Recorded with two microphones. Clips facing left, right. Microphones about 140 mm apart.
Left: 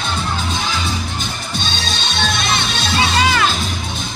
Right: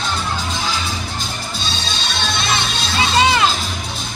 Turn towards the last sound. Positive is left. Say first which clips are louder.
# right 1 dB
turn(degrees=-25)  # may be behind; listen again after turning